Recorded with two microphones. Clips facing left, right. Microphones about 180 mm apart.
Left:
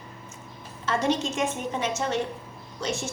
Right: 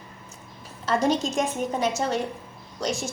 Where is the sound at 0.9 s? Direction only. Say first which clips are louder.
Right 2 dB; 40° right (ahead or behind).